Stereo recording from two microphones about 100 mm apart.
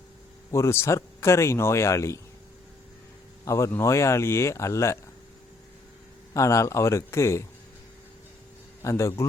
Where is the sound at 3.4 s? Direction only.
30° left (ahead or behind).